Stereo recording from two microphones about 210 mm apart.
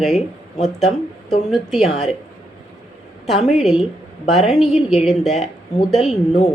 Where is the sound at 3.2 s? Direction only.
Centre (ahead or behind).